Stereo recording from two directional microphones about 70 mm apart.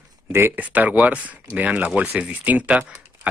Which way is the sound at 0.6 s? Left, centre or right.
Right.